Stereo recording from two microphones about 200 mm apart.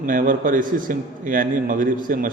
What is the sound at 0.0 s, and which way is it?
A man's voice, 45° right (ahead or behind).